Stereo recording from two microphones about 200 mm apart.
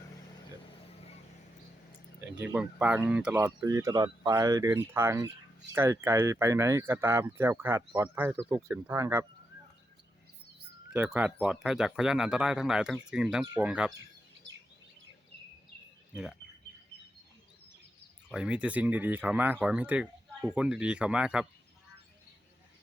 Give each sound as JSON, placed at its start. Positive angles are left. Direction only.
{"t": 2.4, "sound": "speech", "side_deg": -5}
{"t": 3.3, "sound": "speech", "side_deg": -15}
{"t": 10.9, "sound": "speech", "side_deg": -10}
{"t": 16.1, "sound": "speech", "side_deg": -5}
{"t": 18.3, "sound": "speech", "side_deg": -5}